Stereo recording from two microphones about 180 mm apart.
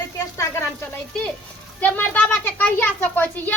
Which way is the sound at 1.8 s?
10° left (ahead or behind).